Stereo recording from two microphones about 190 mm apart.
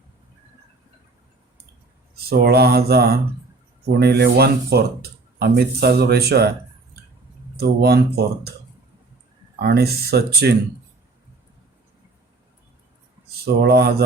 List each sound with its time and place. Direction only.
2.3 s speech: 55° right (ahead or behind)
7.5 s speech: 55° right (ahead or behind)
9.6 s speech: 55° right (ahead or behind)
13.4 s speech: 55° right (ahead or behind)